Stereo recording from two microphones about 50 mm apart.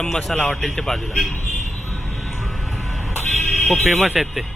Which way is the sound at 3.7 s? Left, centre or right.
Centre.